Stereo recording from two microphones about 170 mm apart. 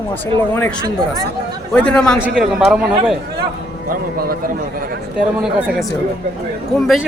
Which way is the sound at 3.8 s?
60° right (ahead or behind).